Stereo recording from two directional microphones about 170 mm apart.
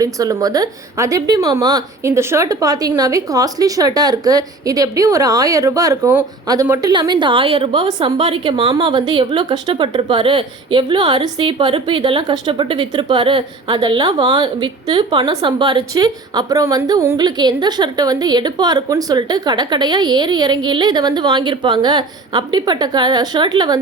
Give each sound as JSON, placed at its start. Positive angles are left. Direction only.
{"t": 0.0, "sound": "a woman's voice", "side_deg": -20}